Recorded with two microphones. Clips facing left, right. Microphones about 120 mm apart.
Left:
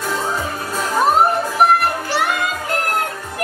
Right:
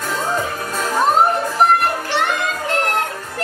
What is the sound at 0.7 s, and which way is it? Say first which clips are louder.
Music: left 1 dB; 5° left (ahead or behind).